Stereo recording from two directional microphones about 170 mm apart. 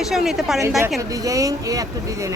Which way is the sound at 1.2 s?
20° right (ahead or behind).